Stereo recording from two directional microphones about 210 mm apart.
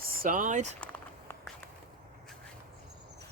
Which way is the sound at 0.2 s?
40° right (ahead or behind).